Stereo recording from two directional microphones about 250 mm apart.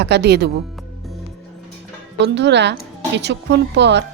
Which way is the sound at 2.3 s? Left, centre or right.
Right.